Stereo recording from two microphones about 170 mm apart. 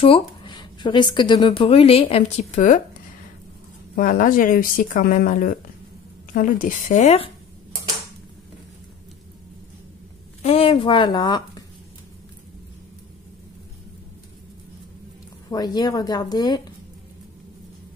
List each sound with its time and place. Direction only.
0.0 s a sound: 30° left (ahead or behind)
1.1 s speech: 25° left (ahead or behind); by 2.8 s 45° left (ahead or behind)
3.9 s speech: 55° left (ahead or behind)
10.4 s speech: 35° left (ahead or behind)
15.5 s speech: 25° left (ahead or behind)